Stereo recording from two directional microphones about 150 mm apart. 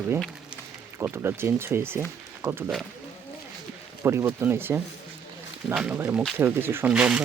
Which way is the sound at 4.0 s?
15° right (ahead or behind).